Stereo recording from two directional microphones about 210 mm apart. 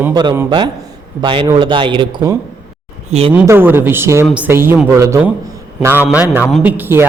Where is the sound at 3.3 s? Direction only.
10° right (ahead or behind).